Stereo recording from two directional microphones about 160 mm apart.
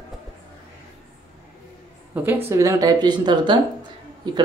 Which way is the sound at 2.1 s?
10° right (ahead or behind).